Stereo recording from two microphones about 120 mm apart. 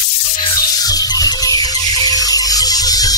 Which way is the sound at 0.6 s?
30° left (ahead or behind).